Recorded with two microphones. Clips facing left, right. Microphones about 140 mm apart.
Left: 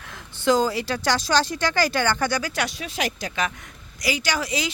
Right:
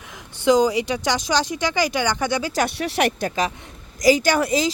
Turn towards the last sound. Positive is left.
turn(degrees=-50)  # may be behind; listen again after turning